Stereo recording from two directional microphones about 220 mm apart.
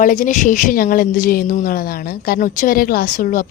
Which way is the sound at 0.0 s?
35° left (ahead or behind).